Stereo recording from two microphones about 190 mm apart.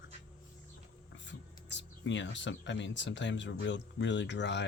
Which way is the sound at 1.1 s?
70° left (ahead or behind).